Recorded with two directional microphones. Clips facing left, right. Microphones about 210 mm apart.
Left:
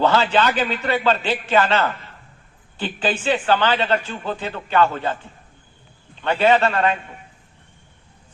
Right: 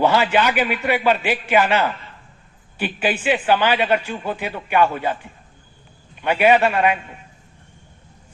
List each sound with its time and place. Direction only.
0.0 s a man's voice: 15° right (ahead or behind)